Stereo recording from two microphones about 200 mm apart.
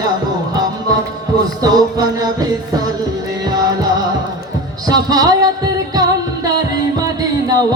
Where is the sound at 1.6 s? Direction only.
20° right (ahead or behind).